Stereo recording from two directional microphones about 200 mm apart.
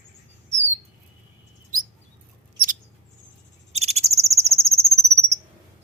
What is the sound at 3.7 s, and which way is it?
Cricket, 30° right (ahead or behind).